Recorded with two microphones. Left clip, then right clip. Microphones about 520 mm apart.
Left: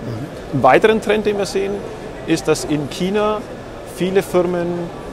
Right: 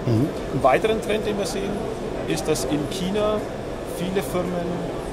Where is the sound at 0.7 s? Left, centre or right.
Left.